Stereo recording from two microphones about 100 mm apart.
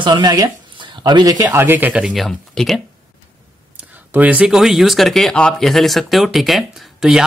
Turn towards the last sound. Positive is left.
turn(degrees=-5)  # may be behind; listen again after turning